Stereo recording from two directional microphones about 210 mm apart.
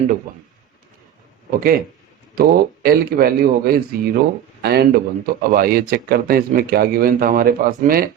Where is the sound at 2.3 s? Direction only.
45° right (ahead or behind).